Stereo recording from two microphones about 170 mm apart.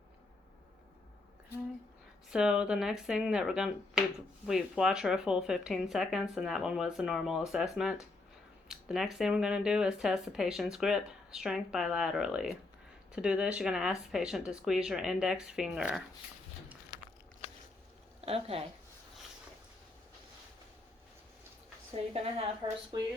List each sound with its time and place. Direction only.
2.3 s speech: 5° right (ahead or behind)
18.3 s a woman's voice: 35° right (ahead or behind)
22.1 s a woman's voice: 35° right (ahead or behind)